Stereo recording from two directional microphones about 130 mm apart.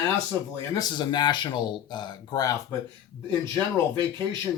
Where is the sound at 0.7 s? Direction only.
35° left (ahead or behind).